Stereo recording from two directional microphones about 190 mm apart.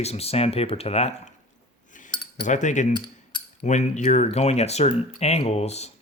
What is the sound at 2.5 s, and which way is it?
Speech, 40° left (ahead or behind).